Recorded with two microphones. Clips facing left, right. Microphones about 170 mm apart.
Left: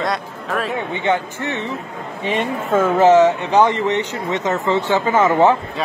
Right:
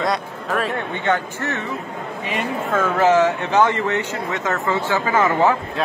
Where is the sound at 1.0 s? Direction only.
10° left (ahead or behind).